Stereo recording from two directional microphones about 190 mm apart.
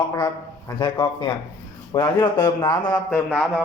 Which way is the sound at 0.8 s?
20° left (ahead or behind).